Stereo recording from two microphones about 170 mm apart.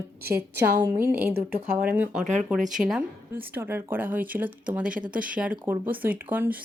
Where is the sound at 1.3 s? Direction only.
60° right (ahead or behind).